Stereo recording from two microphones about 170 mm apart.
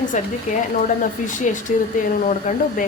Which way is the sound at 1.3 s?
45° left (ahead or behind).